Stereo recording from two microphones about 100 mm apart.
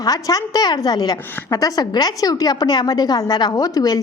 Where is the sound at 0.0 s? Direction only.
40° left (ahead or behind).